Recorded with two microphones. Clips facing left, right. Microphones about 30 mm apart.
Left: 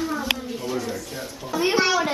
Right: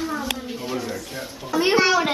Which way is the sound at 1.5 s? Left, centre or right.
Right.